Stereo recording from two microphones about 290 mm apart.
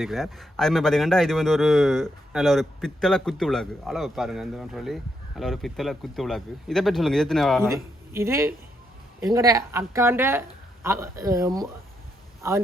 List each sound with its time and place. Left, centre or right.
0.0 s speech: centre
8.1 s a woman's voice: centre